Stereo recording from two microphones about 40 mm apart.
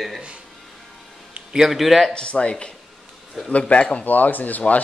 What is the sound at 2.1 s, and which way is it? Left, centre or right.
Speech, left.